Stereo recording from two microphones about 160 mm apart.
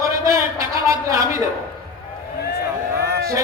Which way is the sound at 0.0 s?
20° right (ahead or behind).